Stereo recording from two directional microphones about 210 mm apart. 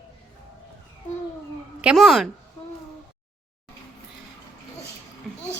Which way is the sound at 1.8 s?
Centre (ahead or behind).